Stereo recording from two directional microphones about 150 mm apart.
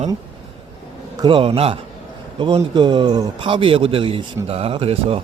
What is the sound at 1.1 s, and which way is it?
Speech, 30° right (ahead or behind).